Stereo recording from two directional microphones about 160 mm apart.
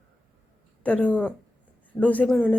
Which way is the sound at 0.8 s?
10° left (ahead or behind).